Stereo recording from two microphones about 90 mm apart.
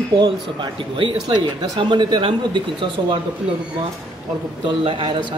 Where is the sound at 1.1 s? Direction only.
65° right (ahead or behind).